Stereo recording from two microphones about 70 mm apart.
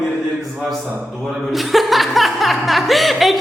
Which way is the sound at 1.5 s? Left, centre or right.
Centre.